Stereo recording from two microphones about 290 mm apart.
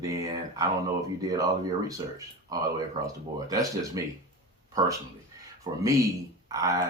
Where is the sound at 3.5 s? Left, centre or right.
Centre.